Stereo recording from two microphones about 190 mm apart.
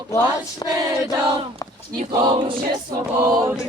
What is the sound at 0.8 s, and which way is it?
Crowd, 20° right (ahead or behind).